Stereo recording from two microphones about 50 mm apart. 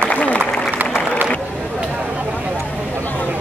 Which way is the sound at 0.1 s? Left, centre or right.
Left.